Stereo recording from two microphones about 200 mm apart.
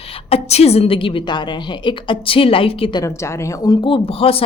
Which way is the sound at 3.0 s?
15° left (ahead or behind).